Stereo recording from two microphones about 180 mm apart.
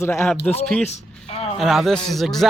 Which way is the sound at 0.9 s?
35° left (ahead or behind).